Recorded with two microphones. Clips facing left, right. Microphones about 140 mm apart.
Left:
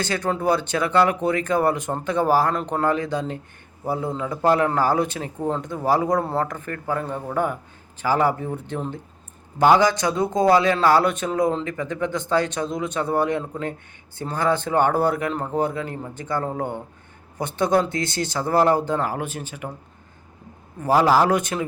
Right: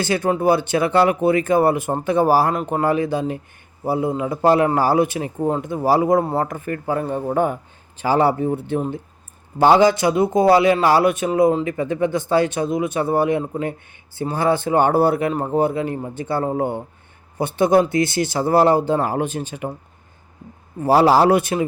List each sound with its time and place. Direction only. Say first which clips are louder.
0.1 s a man's voice: right 7 dB; 10° right (ahead or behind)
0.3 s a man's voice: right 3 dB; 25° right (ahead or behind)
20.9 s a man's voice: right 4 dB; 35° right (ahead or behind)